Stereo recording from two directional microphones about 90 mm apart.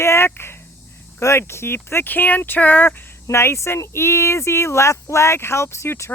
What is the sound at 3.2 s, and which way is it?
Speech, 30° left (ahead or behind).